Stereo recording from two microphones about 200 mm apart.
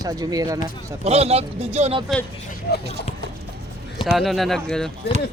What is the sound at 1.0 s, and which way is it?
Speech, 30° right (ahead or behind).